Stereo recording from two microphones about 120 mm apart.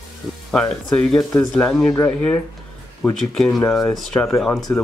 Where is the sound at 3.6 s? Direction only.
15° left (ahead or behind).